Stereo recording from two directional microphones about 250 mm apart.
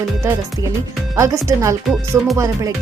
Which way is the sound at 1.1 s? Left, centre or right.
Centre.